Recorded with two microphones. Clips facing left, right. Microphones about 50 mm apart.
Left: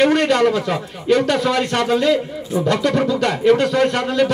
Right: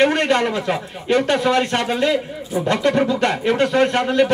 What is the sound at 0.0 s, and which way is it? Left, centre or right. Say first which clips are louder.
Speech: left 2 dB; right.